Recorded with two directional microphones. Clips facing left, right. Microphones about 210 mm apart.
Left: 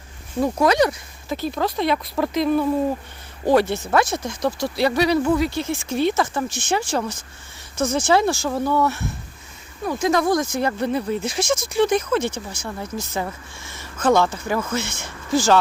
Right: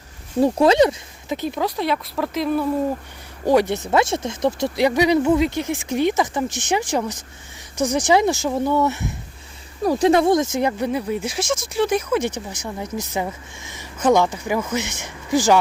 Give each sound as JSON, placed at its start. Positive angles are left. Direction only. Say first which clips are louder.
{"t": 0.3, "sound": "speech", "louder": "right 3 dB", "side_deg": -30}
{"t": 1.5, "sound": "speech", "louder": "left 2 dB", "side_deg": -5}
{"t": 9.8, "sound": "speech", "louder": "right 4 dB", "side_deg": -35}